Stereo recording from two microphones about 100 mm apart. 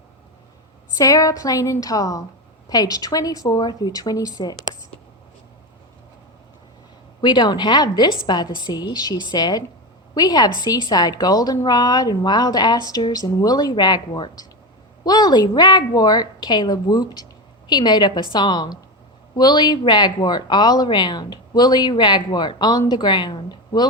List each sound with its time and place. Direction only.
0.9 s a woman's voice: 35° left (ahead or behind)
7.2 s a woman's voice: 45° left (ahead or behind)